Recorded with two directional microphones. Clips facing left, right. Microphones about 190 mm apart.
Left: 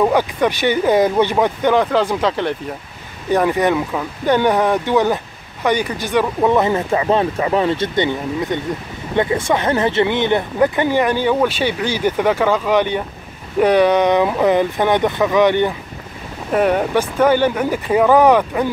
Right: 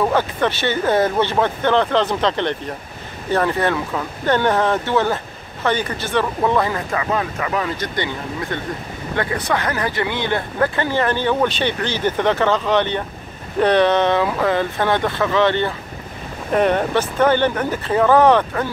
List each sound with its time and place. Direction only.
0.0 s speech: 15° left (ahead or behind)